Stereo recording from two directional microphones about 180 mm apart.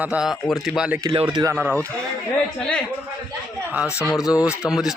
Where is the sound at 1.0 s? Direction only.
25° right (ahead or behind).